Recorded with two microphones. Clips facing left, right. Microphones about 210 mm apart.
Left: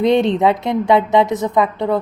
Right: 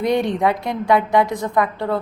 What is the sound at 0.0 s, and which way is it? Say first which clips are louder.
Speech: left 4 dB; 25° left (ahead or behind).